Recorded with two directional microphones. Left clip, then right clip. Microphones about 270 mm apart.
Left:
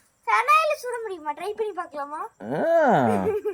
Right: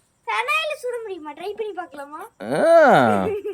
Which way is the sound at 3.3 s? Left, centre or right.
Centre.